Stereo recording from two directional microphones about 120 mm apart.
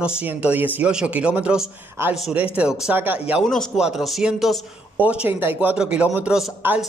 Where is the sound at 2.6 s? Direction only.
5° right (ahead or behind).